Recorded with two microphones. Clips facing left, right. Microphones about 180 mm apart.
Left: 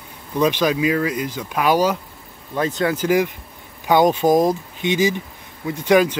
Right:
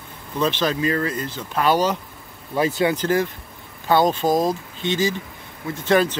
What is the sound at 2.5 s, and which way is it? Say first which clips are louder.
Speech: right 1 dB; 5° right (ahead or behind).